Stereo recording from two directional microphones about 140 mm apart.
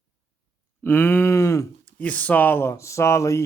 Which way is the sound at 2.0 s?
10° left (ahead or behind).